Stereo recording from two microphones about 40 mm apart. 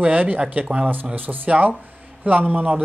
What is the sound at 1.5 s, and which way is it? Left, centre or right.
Speech, right.